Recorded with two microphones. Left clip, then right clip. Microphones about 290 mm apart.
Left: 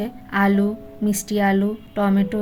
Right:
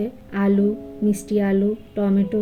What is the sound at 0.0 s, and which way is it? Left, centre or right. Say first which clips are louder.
A woman's voice: left 3 dB; left.